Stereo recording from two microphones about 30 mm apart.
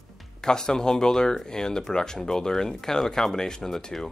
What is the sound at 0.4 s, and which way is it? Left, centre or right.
Speech, left.